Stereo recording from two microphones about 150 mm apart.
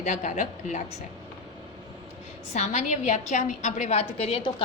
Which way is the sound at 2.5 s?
50° left (ahead or behind).